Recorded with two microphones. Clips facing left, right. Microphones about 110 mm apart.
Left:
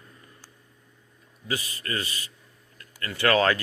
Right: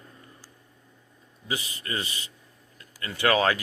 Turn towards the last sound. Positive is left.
turn(degrees=-15)  # may be behind; listen again after turning